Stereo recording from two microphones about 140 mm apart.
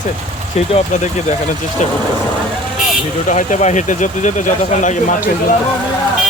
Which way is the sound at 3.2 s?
60° left (ahead or behind).